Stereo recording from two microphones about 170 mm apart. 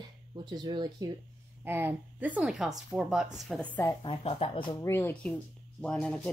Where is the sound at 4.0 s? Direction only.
35° left (ahead or behind).